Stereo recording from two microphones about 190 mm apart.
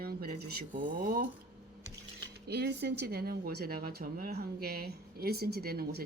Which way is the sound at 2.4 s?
60° right (ahead or behind).